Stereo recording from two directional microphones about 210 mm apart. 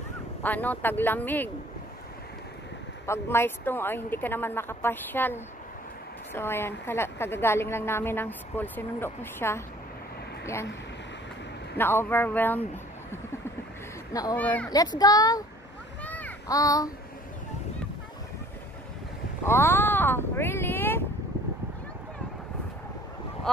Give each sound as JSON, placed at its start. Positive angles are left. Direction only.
{"t": 0.4, "sound": "a woman's voice", "side_deg": 10}
{"t": 3.1, "sound": "a woman's voice", "side_deg": 10}
{"t": 11.7, "sound": "a woman's voice", "side_deg": 10}
{"t": 14.1, "sound": "a woman's voice", "side_deg": 10}
{"t": 14.7, "sound": "a woman's voice", "side_deg": 20}
{"t": 16.0, "sound": "child singing", "side_deg": 5}
{"t": 19.4, "sound": "speech", "side_deg": 10}